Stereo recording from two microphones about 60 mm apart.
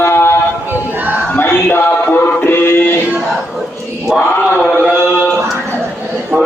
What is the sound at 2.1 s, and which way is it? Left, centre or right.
Music, left.